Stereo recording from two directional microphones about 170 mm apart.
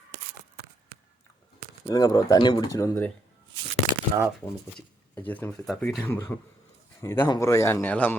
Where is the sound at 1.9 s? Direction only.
25° left (ahead or behind).